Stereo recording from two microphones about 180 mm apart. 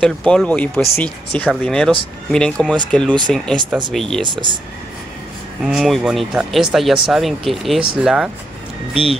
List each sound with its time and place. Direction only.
0.0 s speech: centre (ahead or behind)
4.2 s speech: 25° right (ahead or behind)
5.6 s speech: centre (ahead or behind)